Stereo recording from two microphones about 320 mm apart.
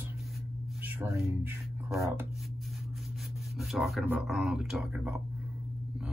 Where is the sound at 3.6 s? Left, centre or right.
Centre.